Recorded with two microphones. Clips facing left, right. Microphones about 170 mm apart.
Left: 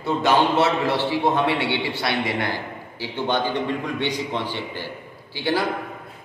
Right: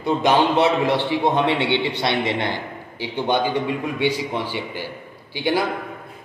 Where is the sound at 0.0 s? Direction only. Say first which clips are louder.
Right 2 dB; 15° right (ahead or behind).